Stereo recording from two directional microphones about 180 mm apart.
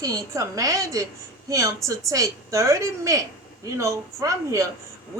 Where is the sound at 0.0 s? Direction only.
20° right (ahead or behind).